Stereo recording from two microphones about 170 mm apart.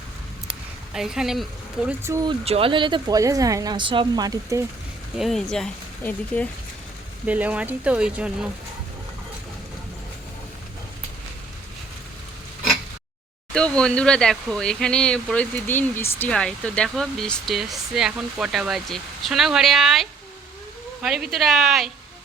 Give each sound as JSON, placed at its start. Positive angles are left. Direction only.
{"t": 0.9, "sound": "speech", "side_deg": -5}
{"t": 1.9, "sound": "speech", "side_deg": -15}
{"t": 2.4, "sound": "a woman's voice", "side_deg": -35}
{"t": 5.1, "sound": "speech", "side_deg": 0}
{"t": 7.3, "sound": "speech", "side_deg": -10}
{"t": 13.5, "sound": "speech", "side_deg": 5}